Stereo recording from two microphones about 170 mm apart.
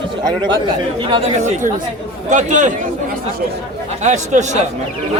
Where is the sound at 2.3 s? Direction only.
45° right (ahead or behind).